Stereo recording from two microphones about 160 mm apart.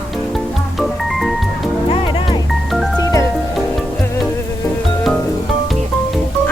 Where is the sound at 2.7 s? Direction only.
Centre (ahead or behind).